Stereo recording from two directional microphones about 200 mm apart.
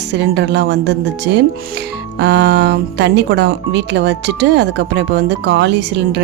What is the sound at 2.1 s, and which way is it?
Speech, 55° right (ahead or behind).